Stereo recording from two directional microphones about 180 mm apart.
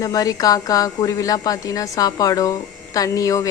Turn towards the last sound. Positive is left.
turn(degrees=20)  # may be behind; listen again after turning